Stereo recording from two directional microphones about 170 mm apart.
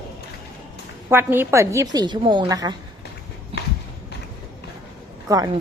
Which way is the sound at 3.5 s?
35° right (ahead or behind).